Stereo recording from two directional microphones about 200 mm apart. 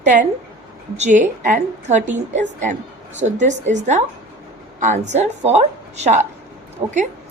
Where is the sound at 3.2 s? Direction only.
35° right (ahead or behind).